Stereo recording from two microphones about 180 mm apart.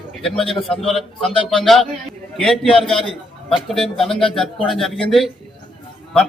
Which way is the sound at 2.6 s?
30° left (ahead or behind).